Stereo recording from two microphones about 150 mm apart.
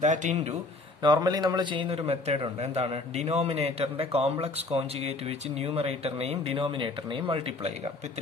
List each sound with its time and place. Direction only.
0.0 s speech: 55° right (ahead or behind)
1.0 s a man's voice: 25° right (ahead or behind)